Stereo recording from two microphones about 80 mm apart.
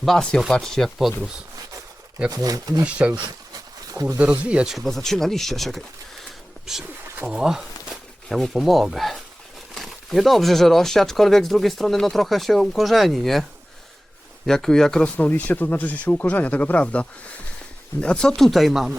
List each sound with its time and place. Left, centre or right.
0.0 s speech: centre
2.3 s speech: right
4.2 s speech: centre
4.7 s speech: centre
7.3 s a sound: centre
8.5 s speech: centre
14.4 s speech: centre